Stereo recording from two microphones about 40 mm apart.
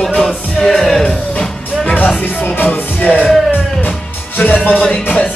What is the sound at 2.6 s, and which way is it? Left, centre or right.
Music, left.